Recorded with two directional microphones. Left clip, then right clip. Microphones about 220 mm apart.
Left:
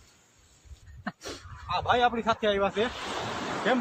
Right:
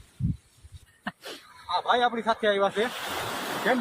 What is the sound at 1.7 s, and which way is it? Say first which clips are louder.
A man's voice: right 1 dB; 25° right (ahead or behind).